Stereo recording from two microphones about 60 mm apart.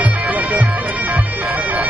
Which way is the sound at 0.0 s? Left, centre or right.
Right.